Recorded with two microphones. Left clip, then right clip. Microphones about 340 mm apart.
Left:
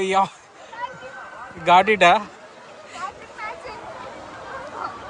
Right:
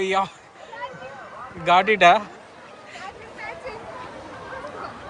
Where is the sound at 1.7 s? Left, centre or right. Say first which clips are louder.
Left 1 dB; centre.